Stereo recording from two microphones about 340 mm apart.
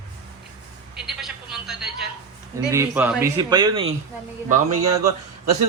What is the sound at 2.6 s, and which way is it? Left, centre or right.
A man's voice, centre.